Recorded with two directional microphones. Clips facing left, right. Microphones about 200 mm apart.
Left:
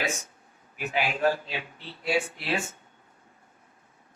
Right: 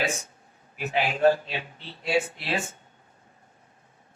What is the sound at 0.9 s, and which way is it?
A man's voice, 30° right (ahead or behind).